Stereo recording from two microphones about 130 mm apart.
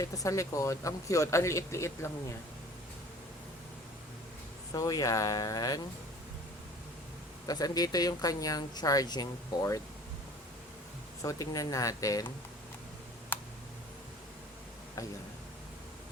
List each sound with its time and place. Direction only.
0.0 s speech: 25° left (ahead or behind)
4.7 s speech: 30° left (ahead or behind)
7.4 s speech: 30° left (ahead or behind)
11.2 s speech: 25° left (ahead or behind)
13.3 s tick: 15° left (ahead or behind)